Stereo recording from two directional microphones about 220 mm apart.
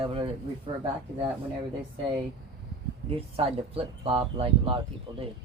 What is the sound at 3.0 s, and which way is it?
Speech, 25° right (ahead or behind).